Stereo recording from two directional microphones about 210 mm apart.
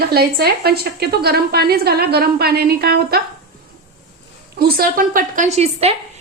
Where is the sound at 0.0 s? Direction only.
50° right (ahead or behind).